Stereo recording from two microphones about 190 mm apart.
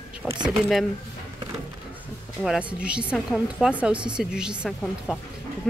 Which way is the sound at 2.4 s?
5° right (ahead or behind).